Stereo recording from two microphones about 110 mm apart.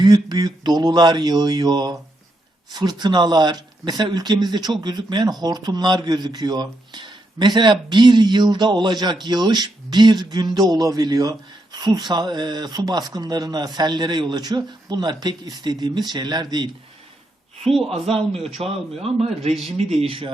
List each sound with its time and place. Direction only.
0.0 s speech: 40° right (ahead or behind)
17.7 s speech: centre (ahead or behind)
18.4 s a man's voice: 65° right (ahead or behind)